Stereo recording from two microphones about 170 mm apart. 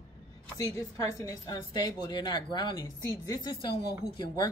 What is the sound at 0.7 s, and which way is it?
A woman's voice, 15° left (ahead or behind).